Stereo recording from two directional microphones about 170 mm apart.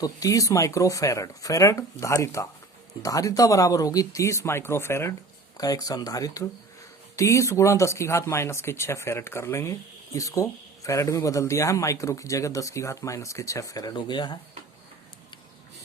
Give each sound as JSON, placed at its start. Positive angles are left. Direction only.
{"t": 0.0, "sound": "speech", "side_deg": 20}